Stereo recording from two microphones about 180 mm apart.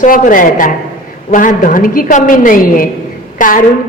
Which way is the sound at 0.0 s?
45° left (ahead or behind).